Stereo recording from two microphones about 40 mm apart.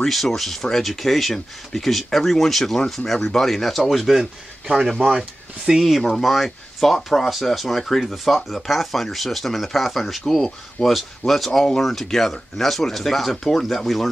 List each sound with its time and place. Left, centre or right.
0.0 s speech: centre